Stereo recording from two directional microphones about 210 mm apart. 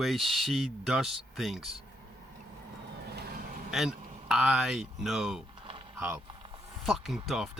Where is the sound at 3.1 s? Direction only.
45° right (ahead or behind).